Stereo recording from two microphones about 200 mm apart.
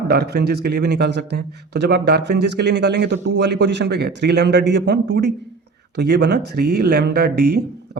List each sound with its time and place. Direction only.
0.1 s a man's voice: 55° right (ahead or behind)